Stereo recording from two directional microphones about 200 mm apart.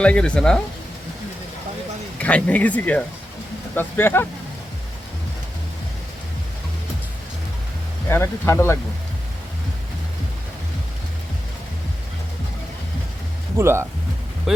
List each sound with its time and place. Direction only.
0.0 s speech: 5° left (ahead or behind)
2.1 s speech: 5° left (ahead or behind)
8.0 s speech: 15° left (ahead or behind)
13.6 s speech: 15° right (ahead or behind)
14.5 s speech: centre (ahead or behind)